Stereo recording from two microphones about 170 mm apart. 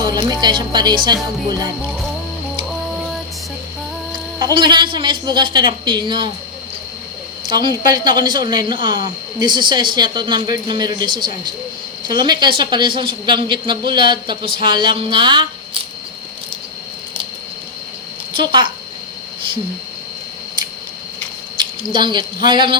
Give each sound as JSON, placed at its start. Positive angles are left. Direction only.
{"t": 0.0, "sound": "music", "side_deg": -20}
{"t": 0.4, "sound": "a man's voice", "side_deg": -25}
{"t": 4.1, "sound": "a man's voice", "side_deg": -25}
{"t": 7.4, "sound": "a woman's voice", "side_deg": -25}
{"t": 18.3, "sound": "a man's voice", "side_deg": -25}
{"t": 21.6, "sound": "speech", "side_deg": -30}